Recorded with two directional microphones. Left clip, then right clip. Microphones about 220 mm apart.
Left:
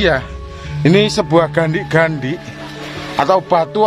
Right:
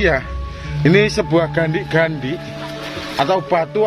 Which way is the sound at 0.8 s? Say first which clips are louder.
Left 1 dB; 20° left (ahead or behind).